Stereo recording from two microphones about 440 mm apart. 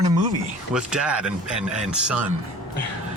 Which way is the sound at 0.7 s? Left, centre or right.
Centre.